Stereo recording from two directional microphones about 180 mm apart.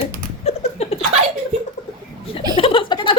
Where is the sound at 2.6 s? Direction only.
30° left (ahead or behind).